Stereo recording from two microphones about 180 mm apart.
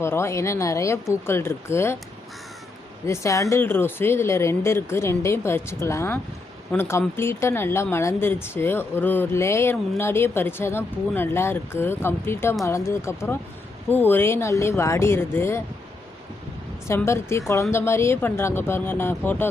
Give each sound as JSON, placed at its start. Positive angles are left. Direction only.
{"t": 0.0, "sound": "speech", "side_deg": 15}
{"t": 3.1, "sound": "speech", "side_deg": 15}
{"t": 16.9, "sound": "speech", "side_deg": 15}